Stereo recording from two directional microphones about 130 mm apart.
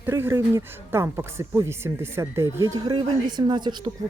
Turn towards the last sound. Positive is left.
turn(degrees=-35)  # may be behind; listen again after turning